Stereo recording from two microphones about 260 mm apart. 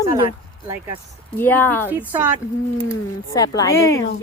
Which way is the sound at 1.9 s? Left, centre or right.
Centre.